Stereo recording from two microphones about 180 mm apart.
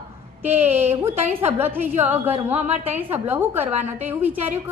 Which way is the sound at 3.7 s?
40° right (ahead or behind).